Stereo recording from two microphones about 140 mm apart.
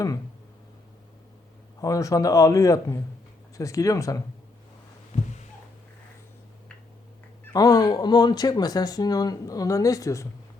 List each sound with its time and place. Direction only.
1.8 s speech: 25° left (ahead or behind)
7.5 s speech: 25° left (ahead or behind)